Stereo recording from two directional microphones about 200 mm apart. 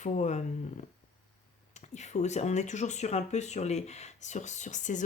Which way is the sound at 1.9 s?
35° left (ahead or behind).